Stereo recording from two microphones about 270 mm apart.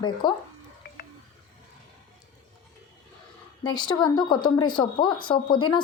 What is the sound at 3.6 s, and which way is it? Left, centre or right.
A woman's voice, centre.